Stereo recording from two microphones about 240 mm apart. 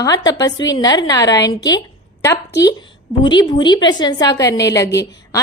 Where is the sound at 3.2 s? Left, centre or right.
Centre.